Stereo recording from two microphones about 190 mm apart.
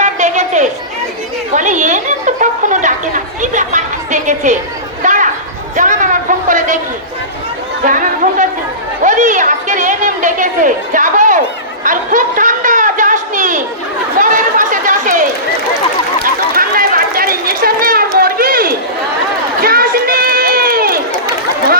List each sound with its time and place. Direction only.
0.0 s a sound: 40° right (ahead or behind)
1.5 s chatter: 40° right (ahead or behind)
3.4 s speech: 40° right (ahead or behind)
5.0 s a sound: 40° right (ahead or behind)
7.9 s speech: 45° right (ahead or behind)
11.8 s a sound: 45° right (ahead or behind)
14.2 s chatter: 45° right (ahead or behind)
18.2 s run: 50° right (ahead or behind)
19.6 s crowd: 50° right (ahead or behind)